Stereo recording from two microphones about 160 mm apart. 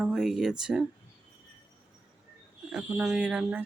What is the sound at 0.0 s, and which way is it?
Speech, centre (ahead or behind).